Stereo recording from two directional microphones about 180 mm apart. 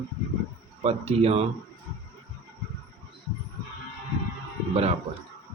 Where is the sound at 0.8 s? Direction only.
35° right (ahead or behind).